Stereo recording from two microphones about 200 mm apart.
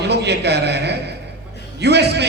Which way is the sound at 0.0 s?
55° right (ahead or behind).